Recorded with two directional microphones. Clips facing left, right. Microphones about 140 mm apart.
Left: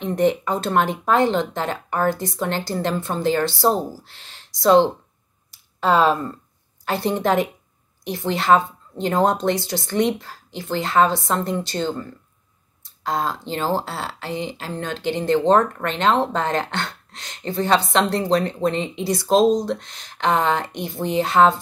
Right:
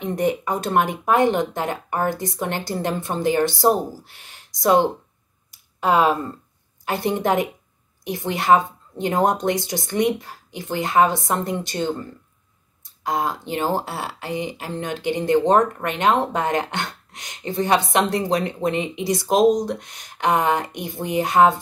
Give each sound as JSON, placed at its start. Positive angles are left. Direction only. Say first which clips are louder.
{"t": 0.2, "sound": "speech", "louder": "left 3 dB", "side_deg": -10}